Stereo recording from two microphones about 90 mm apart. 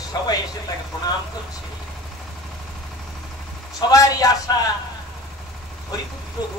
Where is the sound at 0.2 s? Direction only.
45° left (ahead or behind).